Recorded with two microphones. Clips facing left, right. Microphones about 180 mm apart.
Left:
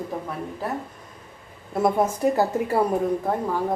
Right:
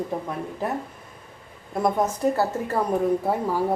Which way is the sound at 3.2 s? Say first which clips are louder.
Right 1 dB; 10° right (ahead or behind).